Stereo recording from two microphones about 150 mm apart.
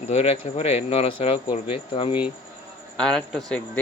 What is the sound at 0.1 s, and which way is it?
Speech, 45° left (ahead or behind).